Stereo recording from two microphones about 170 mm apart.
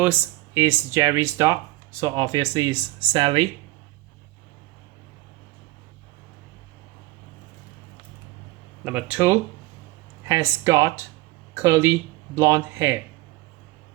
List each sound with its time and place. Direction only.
0.0 s speech: 10° right (ahead or behind); by 3.4 s 30° right (ahead or behind)
8.8 s speech: 10° right (ahead or behind)